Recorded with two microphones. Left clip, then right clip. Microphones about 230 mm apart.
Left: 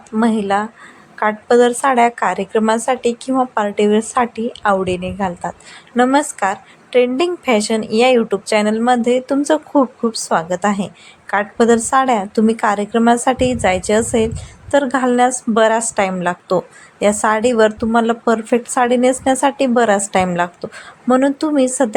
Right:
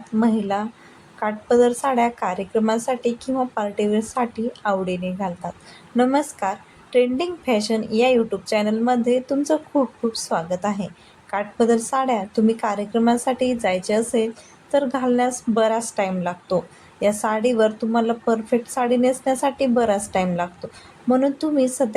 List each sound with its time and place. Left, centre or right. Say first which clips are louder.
0.2 s a woman's voice: left 6 dB; centre